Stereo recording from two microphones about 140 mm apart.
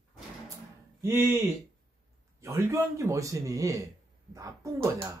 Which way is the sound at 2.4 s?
20° right (ahead or behind).